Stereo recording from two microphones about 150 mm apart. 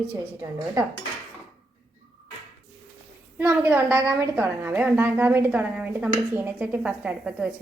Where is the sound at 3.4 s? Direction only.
15° right (ahead or behind).